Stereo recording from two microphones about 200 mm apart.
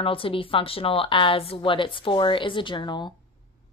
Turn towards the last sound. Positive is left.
turn(degrees=20)  # may be behind; listen again after turning